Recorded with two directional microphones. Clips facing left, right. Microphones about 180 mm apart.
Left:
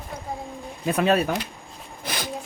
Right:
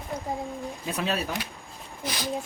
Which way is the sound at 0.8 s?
55° left (ahead or behind).